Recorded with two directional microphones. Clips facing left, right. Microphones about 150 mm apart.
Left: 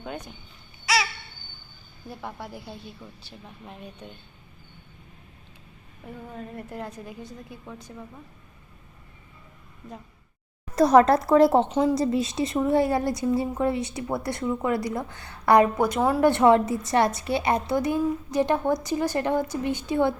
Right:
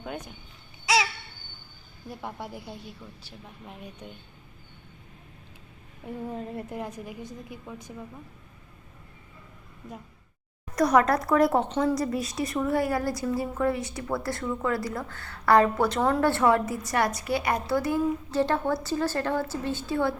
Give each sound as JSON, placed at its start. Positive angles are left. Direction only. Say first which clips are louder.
{"t": 2.2, "sound": "a woman's voice", "louder": "even", "side_deg": -15}
{"t": 6.1, "sound": "a woman's voice", "louder": "right 4 dB", "side_deg": -25}
{"t": 6.7, "sound": "a woman's voice", "louder": "right 1 dB", "side_deg": -15}
{"t": 10.8, "sound": "a woman's voice", "louder": "left 5 dB", "side_deg": 30}
{"t": 16.3, "sound": "a woman's voice", "louder": "left 4 dB", "side_deg": 20}